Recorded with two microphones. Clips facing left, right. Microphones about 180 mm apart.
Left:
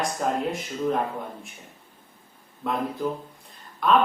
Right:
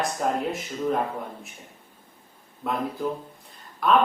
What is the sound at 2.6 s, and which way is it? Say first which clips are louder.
Speech: left 1 dB; centre (ahead or behind).